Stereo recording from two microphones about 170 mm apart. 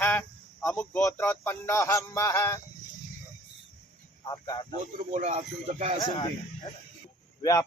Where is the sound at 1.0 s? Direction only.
15° left (ahead or behind).